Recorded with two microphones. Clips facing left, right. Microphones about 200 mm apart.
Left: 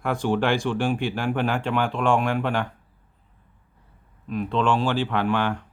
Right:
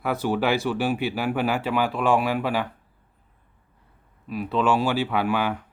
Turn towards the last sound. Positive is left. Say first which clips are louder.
# even
turn(degrees=-5)  # may be behind; listen again after turning